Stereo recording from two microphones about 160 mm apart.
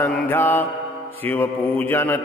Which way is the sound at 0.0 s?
10° left (ahead or behind).